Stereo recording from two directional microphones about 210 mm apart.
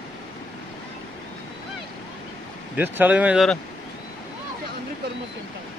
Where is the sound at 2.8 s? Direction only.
10° right (ahead or behind).